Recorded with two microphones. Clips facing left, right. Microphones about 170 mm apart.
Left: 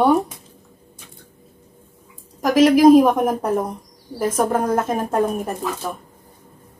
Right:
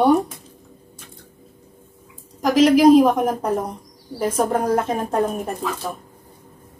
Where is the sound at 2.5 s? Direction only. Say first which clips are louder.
Left 1 dB; 50° left (ahead or behind).